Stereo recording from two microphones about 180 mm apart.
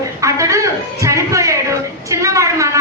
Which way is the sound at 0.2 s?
15° right (ahead or behind).